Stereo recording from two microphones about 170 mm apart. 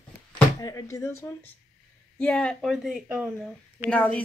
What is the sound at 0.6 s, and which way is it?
A woman's voice, 20° left (ahead or behind).